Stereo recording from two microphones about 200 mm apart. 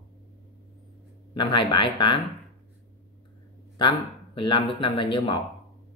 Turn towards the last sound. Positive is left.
turn(degrees=25)  # may be behind; listen again after turning